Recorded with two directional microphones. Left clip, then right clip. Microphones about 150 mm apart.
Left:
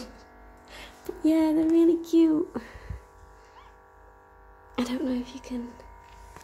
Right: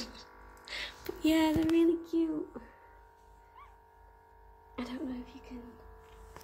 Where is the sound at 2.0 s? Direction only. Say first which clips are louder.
Left 11 dB; 65° left (ahead or behind).